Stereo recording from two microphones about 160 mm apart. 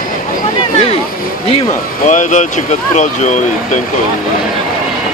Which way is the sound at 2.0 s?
50° left (ahead or behind).